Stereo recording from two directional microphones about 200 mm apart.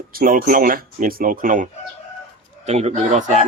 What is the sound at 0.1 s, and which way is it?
Speech, 45° right (ahead or behind).